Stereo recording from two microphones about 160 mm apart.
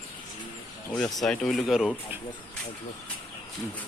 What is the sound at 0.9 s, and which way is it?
Speech, 5° left (ahead or behind).